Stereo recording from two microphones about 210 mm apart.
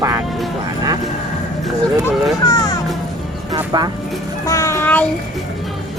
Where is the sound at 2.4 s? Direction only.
15° left (ahead or behind).